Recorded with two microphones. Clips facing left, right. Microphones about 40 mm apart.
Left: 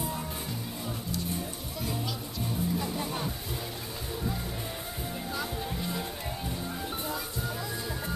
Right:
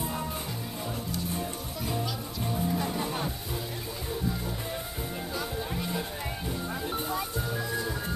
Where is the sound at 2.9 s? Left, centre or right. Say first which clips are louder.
Right 2 dB; centre.